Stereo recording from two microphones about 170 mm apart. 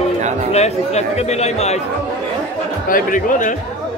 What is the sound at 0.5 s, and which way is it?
Speech, 40° left (ahead or behind).